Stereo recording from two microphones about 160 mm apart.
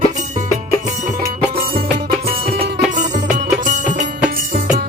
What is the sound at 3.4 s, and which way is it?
Music, 50° right (ahead or behind).